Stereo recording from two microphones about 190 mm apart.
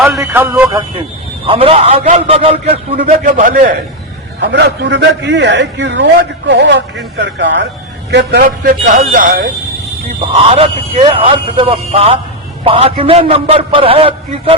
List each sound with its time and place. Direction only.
0.0 s speech: 5° right (ahead or behind)
1.5 s speech: 30° right (ahead or behind)
2.9 s speech: 45° right (ahead or behind)
4.4 s a man's voice: 60° right (ahead or behind)
8.4 s speech: 40° right (ahead or behind)
10.3 s a man's voice: 30° right (ahead or behind)